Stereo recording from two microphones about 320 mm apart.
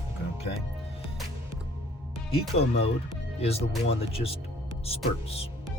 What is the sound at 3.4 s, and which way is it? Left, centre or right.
Speech, centre.